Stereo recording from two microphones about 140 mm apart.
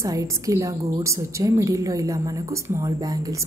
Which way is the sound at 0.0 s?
25° right (ahead or behind).